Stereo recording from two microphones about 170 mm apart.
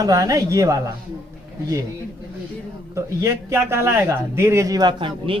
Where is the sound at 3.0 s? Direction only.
15° right (ahead or behind).